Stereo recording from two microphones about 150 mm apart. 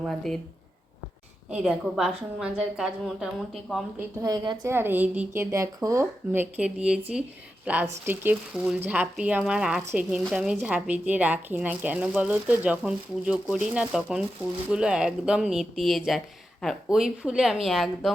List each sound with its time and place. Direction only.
0.0 s speech: centre (ahead or behind)
1.5 s speech: 5° right (ahead or behind)
4.2 s a woman's voice: 25° right (ahead or behind)
4.7 s speech: 15° right (ahead or behind)